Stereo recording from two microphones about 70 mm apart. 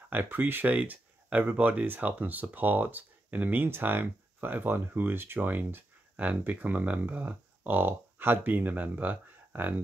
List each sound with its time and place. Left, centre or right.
0.1 s speech: right